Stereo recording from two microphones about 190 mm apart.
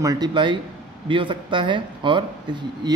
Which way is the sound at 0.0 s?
20° right (ahead or behind).